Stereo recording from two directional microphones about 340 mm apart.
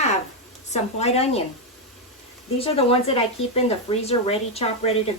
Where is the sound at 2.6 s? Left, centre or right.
Centre.